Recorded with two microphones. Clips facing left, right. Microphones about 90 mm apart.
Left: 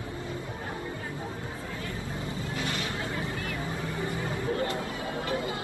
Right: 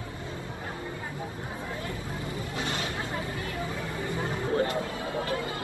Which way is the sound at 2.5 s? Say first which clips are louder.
Even; 25° right (ahead or behind).